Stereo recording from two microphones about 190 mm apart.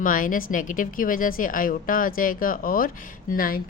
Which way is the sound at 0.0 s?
45° left (ahead or behind).